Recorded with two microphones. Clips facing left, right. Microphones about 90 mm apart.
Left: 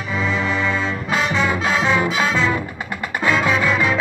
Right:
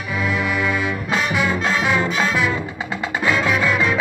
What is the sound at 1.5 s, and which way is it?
Music, 10° left (ahead or behind).